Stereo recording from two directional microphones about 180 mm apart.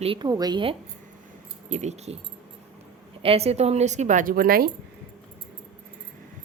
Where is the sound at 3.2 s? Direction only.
35° right (ahead or behind); by 4.6 s 55° right (ahead or behind).